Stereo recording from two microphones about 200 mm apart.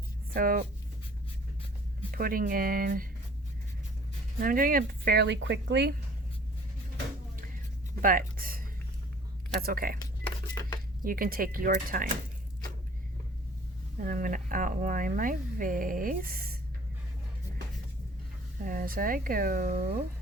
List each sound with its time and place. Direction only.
0.3 s speech: 45° right (ahead or behind)
2.1 s speech: 45° right (ahead or behind)
4.4 s speech: 45° right (ahead or behind); by 5.9 s 60° right (ahead or behind)
8.0 s speech: 45° right (ahead or behind)
10.2 s typewriter: 15° left (ahead or behind)
11.0 s speech: 45° right (ahead or behind)
14.0 s speech: 45° right (ahead or behind)
18.6 s speech: 45° right (ahead or behind)